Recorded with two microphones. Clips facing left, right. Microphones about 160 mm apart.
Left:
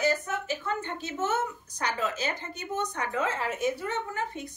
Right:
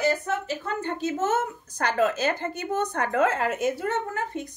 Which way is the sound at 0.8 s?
40° right (ahead or behind).